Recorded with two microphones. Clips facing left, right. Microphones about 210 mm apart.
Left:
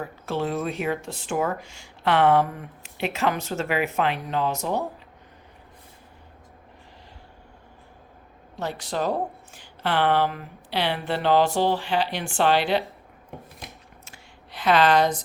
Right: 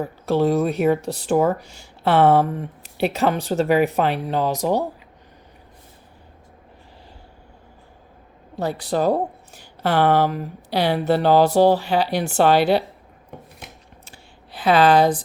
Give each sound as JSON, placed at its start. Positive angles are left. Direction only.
{"t": 0.3, "sound": "speech", "side_deg": -35}
{"t": 8.5, "sound": "speech", "side_deg": -35}
{"t": 14.0, "sound": "a sound", "side_deg": -35}